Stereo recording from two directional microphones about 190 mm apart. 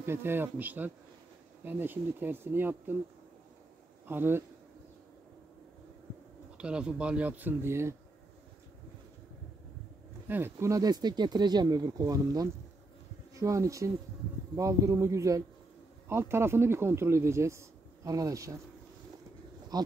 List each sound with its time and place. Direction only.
0.0 s speech: 10° right (ahead or behind)
4.1 s speech: 10° right (ahead or behind)
6.6 s speech: 5° right (ahead or behind)
10.2 s speech: 10° right (ahead or behind)
19.7 s speech: 20° right (ahead or behind)